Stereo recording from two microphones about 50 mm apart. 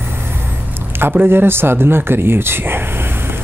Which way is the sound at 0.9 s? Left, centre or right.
Right.